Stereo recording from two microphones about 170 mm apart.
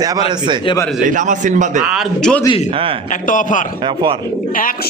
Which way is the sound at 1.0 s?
50° right (ahead or behind).